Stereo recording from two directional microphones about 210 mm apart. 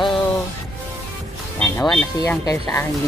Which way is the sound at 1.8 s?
5° left (ahead or behind).